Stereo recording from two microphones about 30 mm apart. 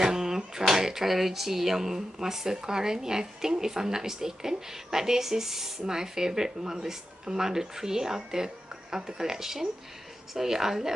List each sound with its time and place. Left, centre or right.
0.0 s finger snapping: centre
0.6 s speech: centre